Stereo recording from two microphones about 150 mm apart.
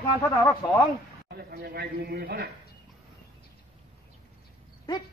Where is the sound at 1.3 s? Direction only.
90° right.